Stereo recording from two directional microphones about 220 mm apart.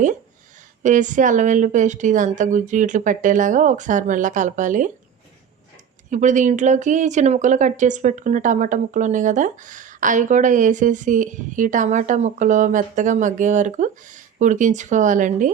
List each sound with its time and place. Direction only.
0.8 s speech: 35° right (ahead or behind)
6.1 s speech: 35° right (ahead or behind)